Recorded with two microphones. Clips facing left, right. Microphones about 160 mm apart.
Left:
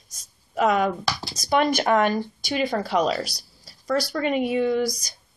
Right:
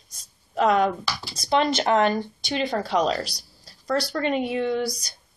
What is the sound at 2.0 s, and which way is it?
Speech, 10° left (ahead or behind).